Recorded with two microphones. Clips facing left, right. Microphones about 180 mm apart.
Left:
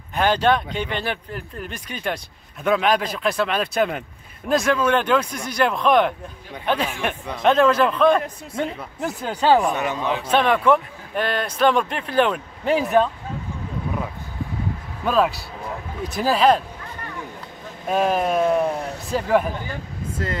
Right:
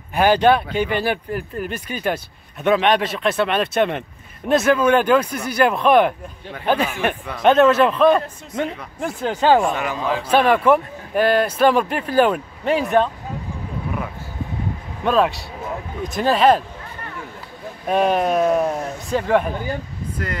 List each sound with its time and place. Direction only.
0.1 s a man's voice: 10° right (ahead or behind)
9.8 s a man's voice: 20° left (ahead or behind)
10.2 s speech: 5° right (ahead or behind)
15.0 s a man's voice: centre (ahead or behind)
17.8 s a man's voice: centre (ahead or behind)